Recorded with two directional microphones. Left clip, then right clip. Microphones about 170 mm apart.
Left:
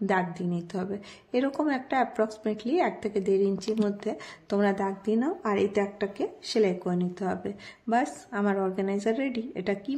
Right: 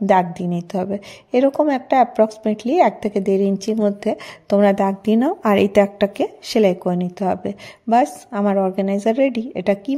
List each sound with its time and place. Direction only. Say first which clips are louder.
0.1 s a woman's voice: right 13 dB; 40° right (ahead or behind)